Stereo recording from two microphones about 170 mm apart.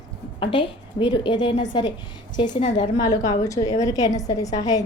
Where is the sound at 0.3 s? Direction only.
30° left (ahead or behind).